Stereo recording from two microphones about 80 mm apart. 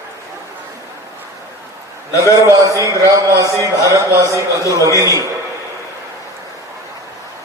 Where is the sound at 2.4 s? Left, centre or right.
Right.